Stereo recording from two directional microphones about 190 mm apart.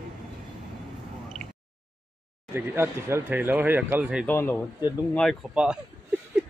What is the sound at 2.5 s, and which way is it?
Speech, 10° right (ahead or behind).